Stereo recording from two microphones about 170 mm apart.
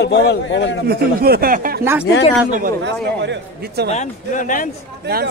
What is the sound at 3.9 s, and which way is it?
Speech, 50° left (ahead or behind).